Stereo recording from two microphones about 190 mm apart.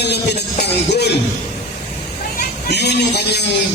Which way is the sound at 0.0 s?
60° left (ahead or behind).